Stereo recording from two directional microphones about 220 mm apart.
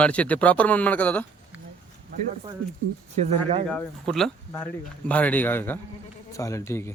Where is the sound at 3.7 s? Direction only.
Centre (ahead or behind).